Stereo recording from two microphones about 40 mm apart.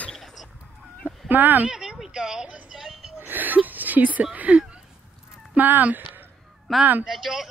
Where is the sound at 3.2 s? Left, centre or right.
Right.